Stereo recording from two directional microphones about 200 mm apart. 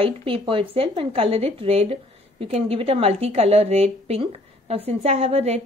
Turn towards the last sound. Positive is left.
turn(degrees=-30)  # may be behind; listen again after turning